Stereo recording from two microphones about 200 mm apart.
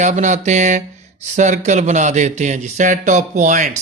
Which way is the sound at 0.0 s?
35° right (ahead or behind).